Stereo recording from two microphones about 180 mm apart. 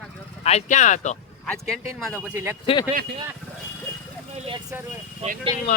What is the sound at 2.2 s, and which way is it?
Speech, 15° right (ahead or behind).